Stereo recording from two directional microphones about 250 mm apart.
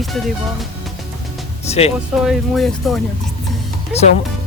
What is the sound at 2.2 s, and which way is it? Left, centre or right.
Speech, centre.